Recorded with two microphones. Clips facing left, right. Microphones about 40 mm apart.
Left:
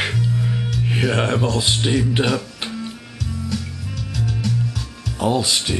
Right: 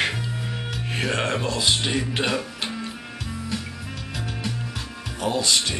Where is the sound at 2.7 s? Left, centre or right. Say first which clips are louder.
Left 2 dB; centre.